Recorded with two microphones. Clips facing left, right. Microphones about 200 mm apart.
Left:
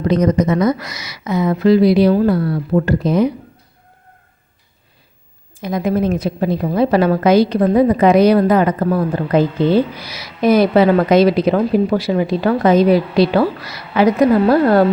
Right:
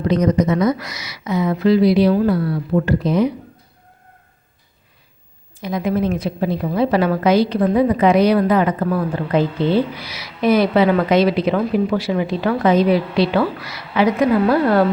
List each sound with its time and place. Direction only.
0.1 s a woman's voice: 45° left (ahead or behind)
5.6 s a woman's voice: 45° left (ahead or behind)